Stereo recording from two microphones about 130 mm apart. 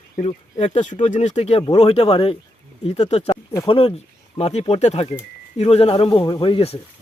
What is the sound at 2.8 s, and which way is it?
Speech, 55° left (ahead or behind).